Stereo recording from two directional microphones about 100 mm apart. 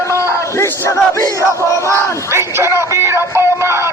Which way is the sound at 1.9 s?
30° right (ahead or behind).